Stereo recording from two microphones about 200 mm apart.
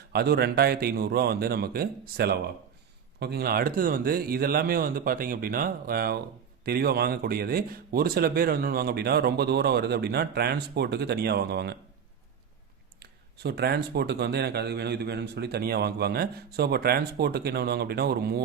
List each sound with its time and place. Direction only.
0.1 s speech: 50° right (ahead or behind)
13.0 s speech: 55° right (ahead or behind)